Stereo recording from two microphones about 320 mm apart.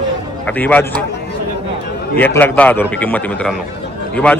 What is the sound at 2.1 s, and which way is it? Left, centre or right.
A man's voice, centre.